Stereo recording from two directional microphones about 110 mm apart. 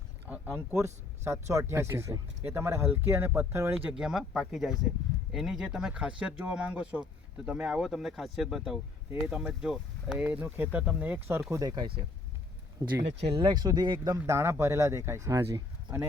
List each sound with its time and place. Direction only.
0.3 s speech: 20° right (ahead or behind)
3.8 s speech: 5° right (ahead or behind); by 11.6 s 20° right (ahead or behind)
11.6 s speech: 40° right (ahead or behind)
13.2 s speech: 50° right (ahead or behind)
14.3 s speech: 25° right (ahead or behind)